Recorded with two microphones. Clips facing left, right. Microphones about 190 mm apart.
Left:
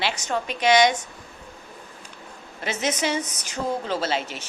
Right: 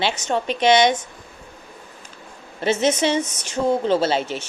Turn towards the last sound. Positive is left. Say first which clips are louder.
# right 6 dB
turn(degrees=-30)  # may be behind; listen again after turning